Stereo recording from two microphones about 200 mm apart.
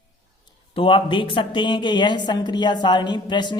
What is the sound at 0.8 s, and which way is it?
A woman's voice, 25° left (ahead or behind).